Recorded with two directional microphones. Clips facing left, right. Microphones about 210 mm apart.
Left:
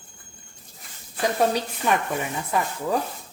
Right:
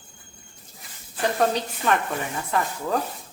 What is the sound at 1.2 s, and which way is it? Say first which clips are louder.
Speech: even; 10° left (ahead or behind).